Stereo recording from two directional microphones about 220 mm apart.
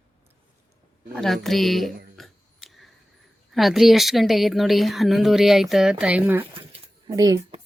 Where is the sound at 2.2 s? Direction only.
Centre (ahead or behind).